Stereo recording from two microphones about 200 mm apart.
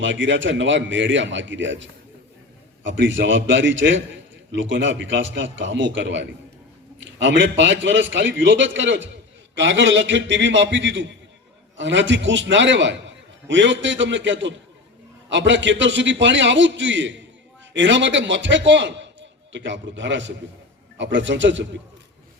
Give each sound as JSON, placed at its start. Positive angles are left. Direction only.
{"t": 0.0, "sound": "a man's voice", "side_deg": -65}